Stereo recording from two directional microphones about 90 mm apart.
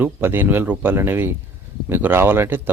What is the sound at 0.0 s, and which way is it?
Speech, 25° right (ahead or behind).